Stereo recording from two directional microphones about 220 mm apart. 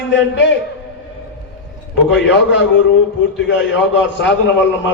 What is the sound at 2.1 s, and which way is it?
A man's voice, 55° left (ahead or behind).